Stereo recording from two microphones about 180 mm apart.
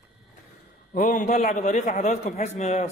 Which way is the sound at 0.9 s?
45° left (ahead or behind).